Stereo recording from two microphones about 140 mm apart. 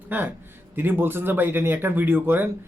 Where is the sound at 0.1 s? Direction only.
15° right (ahead or behind).